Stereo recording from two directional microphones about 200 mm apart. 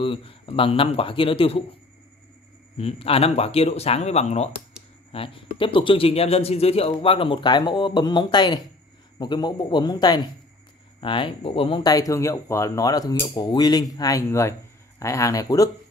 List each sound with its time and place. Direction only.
0.0 s speech: 25° left (ahead or behind)
2.8 s speech: 30° left (ahead or behind)